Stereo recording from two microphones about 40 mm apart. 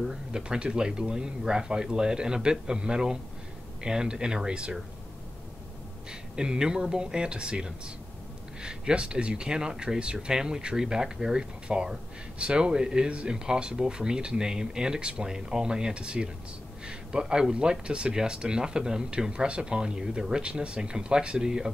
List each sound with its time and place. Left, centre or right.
0.0 s speech: centre
0.4 s speech: right
6.3 s speech: centre